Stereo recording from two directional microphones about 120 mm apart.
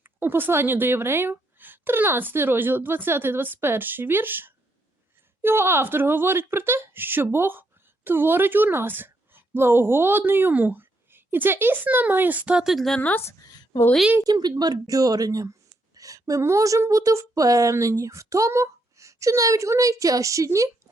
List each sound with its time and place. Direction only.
0.0 s a woman's voice: 15° right (ahead or behind); by 13.0 s centre (ahead or behind)
13.0 s speech: 15° left (ahead or behind)
14.2 s a woman's voice: 35° right (ahead or behind)